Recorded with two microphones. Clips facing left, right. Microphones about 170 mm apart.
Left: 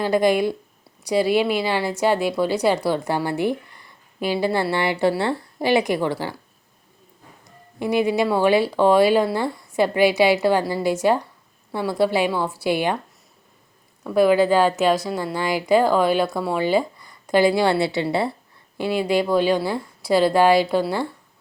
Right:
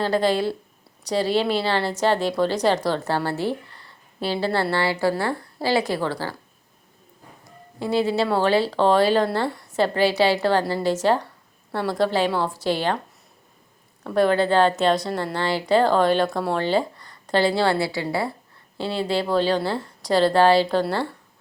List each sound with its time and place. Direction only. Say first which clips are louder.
0.0 s a woman's voice: left 2 dB; 15° left (ahead or behind)
7.8 s a woman's voice: left 2 dB; 15° left (ahead or behind)
14.0 s a woman's voice: left 3 dB; 10° left (ahead or behind); by 18.3 s 25° left (ahead or behind)
18.8 s a woman's voice: left 3 dB; 15° left (ahead or behind)